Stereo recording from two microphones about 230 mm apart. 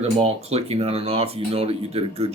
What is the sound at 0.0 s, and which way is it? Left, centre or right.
Speech, right.